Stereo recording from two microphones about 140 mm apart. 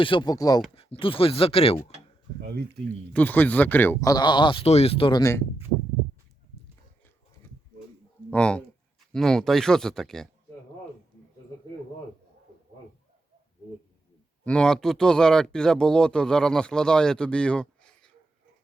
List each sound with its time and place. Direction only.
0.0 s speech: 35° left (ahead or behind)
0.8 s speech: 40° left (ahead or behind)
3.1 s speech: 10° left (ahead or behind)
4.0 s speech: 30° left (ahead or behind)
5.2 s speech: 20° left (ahead or behind)
8.3 s speech: 10° left (ahead or behind)
14.4 s speech: 5° left (ahead or behind)